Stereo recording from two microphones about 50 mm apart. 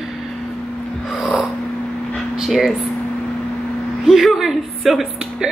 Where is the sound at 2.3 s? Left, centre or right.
Centre.